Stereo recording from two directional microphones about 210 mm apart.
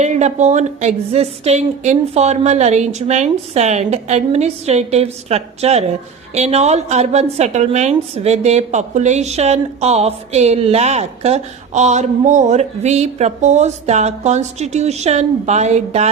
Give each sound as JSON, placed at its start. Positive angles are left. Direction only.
{"t": 0.0, "sound": "a woman's voice", "side_deg": -35}